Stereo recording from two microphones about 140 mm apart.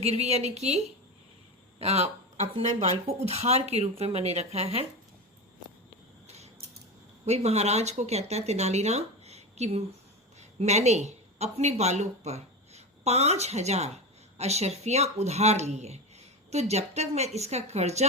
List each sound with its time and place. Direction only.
0.0 s speech: 50° right (ahead or behind)
1.8 s speech: 50° right (ahead or behind)
6.2 s mechanisms: 50° right (ahead or behind)
7.3 s speech: 50° right (ahead or behind)